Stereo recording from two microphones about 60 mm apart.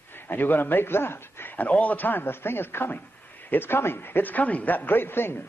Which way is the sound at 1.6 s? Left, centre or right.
Left.